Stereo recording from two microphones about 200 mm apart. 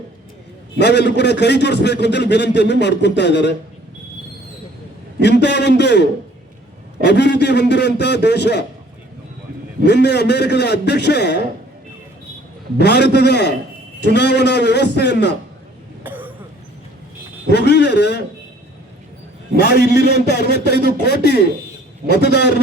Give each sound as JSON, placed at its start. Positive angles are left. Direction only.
{"t": 0.8, "sound": "a man's voice", "side_deg": 60}
{"t": 5.2, "sound": "a man's voice", "side_deg": 60}
{"t": 9.8, "sound": "a man's voice", "side_deg": 55}
{"t": 12.8, "sound": "a man's voice", "side_deg": 55}
{"t": 16.0, "sound": "cough", "side_deg": -10}
{"t": 17.5, "sound": "a man's voice", "side_deg": 60}
{"t": 19.5, "sound": "a man's voice", "side_deg": 55}